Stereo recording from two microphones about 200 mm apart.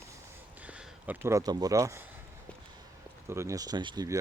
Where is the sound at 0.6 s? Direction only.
5° right (ahead or behind).